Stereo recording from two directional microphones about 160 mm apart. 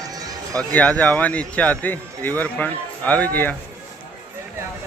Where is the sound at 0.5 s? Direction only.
10° left (ahead or behind).